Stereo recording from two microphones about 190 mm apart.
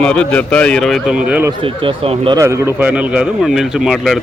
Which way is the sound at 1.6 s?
30° right (ahead or behind).